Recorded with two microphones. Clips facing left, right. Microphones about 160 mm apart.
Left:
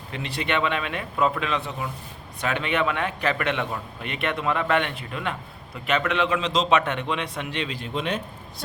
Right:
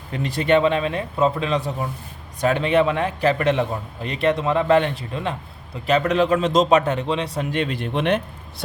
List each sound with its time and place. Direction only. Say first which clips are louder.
0.1 s a man's voice: right 9 dB; 45° right (ahead or behind)
7.5 s speech: right 6 dB; 50° right (ahead or behind)